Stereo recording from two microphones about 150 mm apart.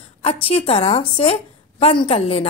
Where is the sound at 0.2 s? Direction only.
40° left (ahead or behind).